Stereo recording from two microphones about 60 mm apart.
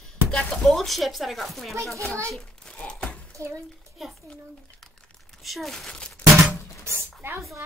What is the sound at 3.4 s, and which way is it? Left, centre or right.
Speech, right.